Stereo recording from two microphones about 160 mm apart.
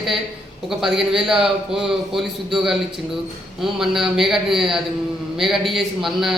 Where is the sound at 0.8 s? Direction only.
5° right (ahead or behind).